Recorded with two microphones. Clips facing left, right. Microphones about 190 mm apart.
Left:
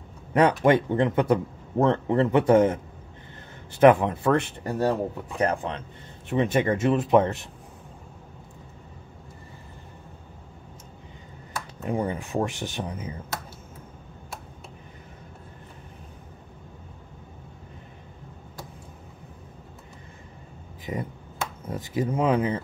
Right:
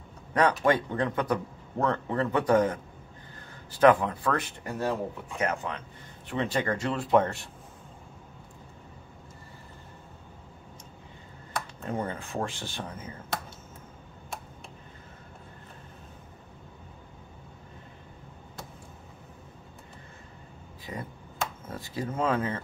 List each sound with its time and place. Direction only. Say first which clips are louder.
0.3 s speech: left 4 dB; 25° left (ahead or behind)
6.2 s speech: left 6 dB; 20° left (ahead or behind)
11.8 s speech: left 6 dB; 15° left (ahead or behind)
20.9 s speech: left 6 dB; 20° left (ahead or behind)